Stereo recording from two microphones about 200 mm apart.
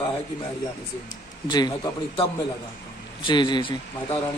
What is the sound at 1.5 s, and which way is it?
Speech, 20° left (ahead or behind).